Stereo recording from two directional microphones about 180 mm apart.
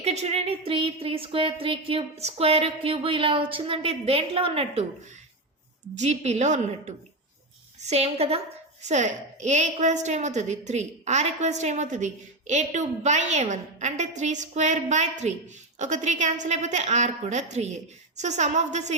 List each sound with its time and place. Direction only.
0.0 s a woman's voice: 35° right (ahead or behind)
6.0 s a woman's voice: 40° right (ahead or behind)